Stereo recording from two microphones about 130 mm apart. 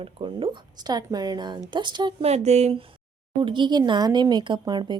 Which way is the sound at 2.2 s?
60° right (ahead or behind).